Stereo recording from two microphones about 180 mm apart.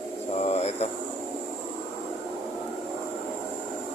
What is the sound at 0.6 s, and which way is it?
Speech, 35° left (ahead or behind).